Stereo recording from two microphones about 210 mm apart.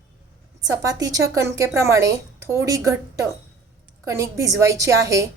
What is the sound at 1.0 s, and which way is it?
A woman's voice, 15° right (ahead or behind).